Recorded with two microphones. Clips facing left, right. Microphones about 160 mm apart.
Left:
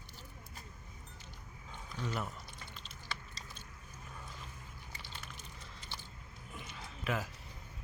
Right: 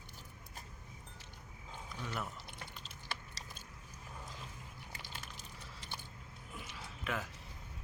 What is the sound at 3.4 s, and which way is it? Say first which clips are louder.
Boat: even; 75° right (ahead or behind).